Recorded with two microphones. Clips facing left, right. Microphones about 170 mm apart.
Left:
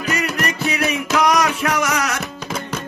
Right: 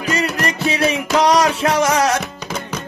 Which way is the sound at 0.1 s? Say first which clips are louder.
Right 2 dB; 30° right (ahead or behind).